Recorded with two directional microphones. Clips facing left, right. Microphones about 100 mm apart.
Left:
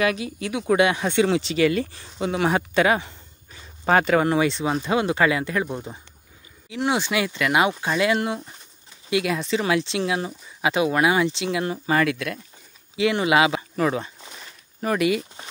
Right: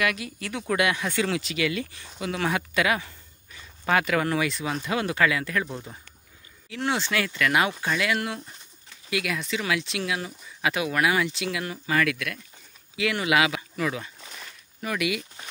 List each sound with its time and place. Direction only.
0.0 s speech: 25° left (ahead or behind)